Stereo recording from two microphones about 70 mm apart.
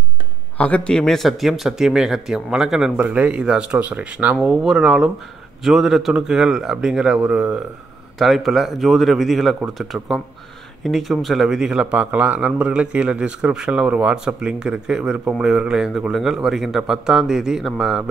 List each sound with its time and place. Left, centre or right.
0.6 s a man's voice: centre
0.9 s a man's voice: centre; by 4.6 s right
4.6 s a man's voice: centre
8.2 s speech: centre
9.9 s a man's voice: centre
10.8 s a man's voice: centre